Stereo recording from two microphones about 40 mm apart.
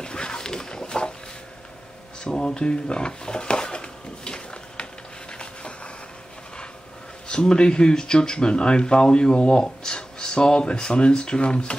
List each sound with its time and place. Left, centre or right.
0.0 s dog: left
2.2 s a sound: left
7.2 s speech: left